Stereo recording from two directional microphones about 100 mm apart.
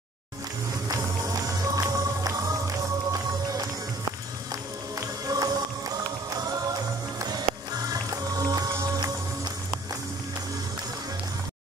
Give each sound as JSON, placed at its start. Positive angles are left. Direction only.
{"t": 0.8, "sound": "music", "side_deg": -35}
{"t": 4.9, "sound": "music", "side_deg": -35}